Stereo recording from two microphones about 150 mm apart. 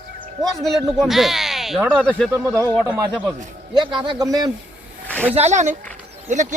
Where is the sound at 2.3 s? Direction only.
20° right (ahead or behind).